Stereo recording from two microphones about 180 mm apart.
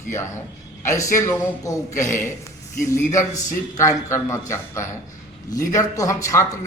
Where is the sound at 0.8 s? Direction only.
15° left (ahead or behind).